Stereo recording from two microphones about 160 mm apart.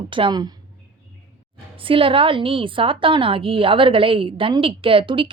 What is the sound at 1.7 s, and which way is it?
A woman's voice, 35° right (ahead or behind).